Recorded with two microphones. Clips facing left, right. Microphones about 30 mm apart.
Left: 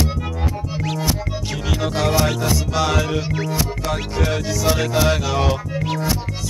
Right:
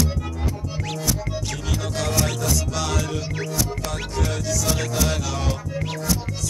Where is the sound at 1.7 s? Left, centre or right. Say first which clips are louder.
Left 7 dB; left.